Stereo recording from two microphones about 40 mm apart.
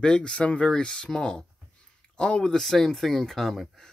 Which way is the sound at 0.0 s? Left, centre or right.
Left.